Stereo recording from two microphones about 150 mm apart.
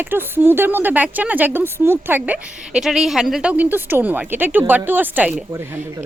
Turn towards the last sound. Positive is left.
turn(degrees=-15)  # may be behind; listen again after turning